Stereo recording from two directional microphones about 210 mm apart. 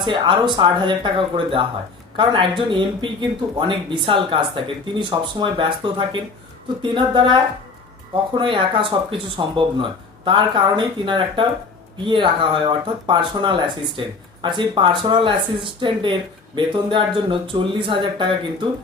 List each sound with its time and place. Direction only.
0.0 s speech: 20° right (ahead or behind)